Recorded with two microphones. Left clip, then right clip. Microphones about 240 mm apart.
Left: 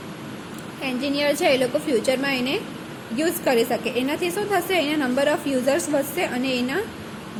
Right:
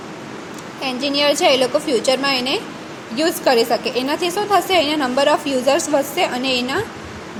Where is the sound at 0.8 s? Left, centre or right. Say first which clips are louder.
Right 5 dB; centre.